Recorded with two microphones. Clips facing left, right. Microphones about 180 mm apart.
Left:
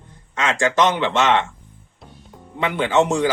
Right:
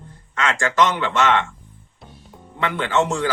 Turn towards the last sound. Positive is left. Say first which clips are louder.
# left 3 dB
turn(degrees=15)  # may be behind; listen again after turning